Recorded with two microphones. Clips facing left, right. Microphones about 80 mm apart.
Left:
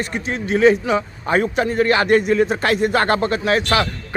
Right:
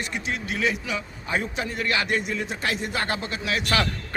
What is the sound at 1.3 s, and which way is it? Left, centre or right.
A man's voice, left.